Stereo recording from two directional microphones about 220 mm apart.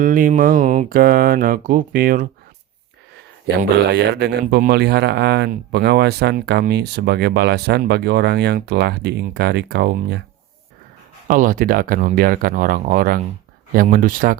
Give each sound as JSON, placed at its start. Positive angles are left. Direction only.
{"t": 0.0, "sound": "speech", "side_deg": -40}
{"t": 3.4, "sound": "a man's voice", "side_deg": -45}
{"t": 11.3, "sound": "speech", "side_deg": -40}